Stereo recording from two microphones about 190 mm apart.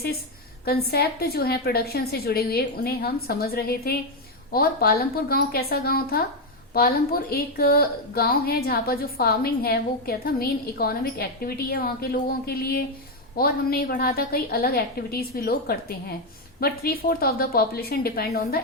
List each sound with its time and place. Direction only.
0.6 s a woman's voice: 55° left (ahead or behind)